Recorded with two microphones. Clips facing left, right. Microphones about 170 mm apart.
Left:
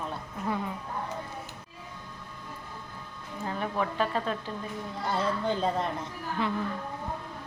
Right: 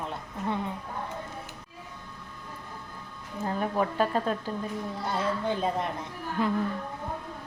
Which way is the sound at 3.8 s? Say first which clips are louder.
Right 2 dB; 40° right (ahead or behind).